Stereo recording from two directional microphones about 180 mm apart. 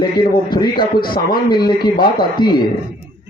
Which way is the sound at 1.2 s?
55° left (ahead or behind).